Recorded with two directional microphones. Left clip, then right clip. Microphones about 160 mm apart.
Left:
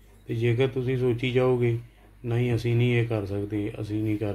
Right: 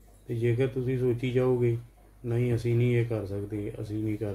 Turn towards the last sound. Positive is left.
turn(degrees=25)  # may be behind; listen again after turning